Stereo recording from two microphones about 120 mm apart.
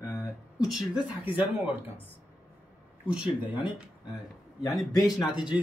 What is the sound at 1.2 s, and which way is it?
Speech, 15° right (ahead or behind).